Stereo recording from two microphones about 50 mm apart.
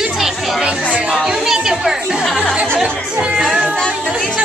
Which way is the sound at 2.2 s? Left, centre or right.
Centre.